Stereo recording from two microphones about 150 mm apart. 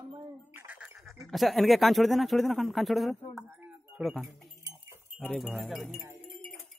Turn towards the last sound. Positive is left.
turn(degrees=0)  # may be behind; listen again after turning